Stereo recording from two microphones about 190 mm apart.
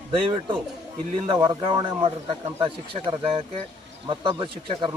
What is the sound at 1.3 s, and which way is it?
Speech, 25° right (ahead or behind).